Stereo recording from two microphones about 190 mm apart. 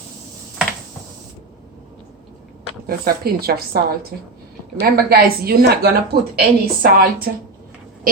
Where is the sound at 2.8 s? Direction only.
55° right (ahead or behind).